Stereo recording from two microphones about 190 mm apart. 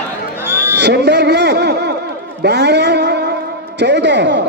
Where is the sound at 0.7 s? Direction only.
60° right (ahead or behind).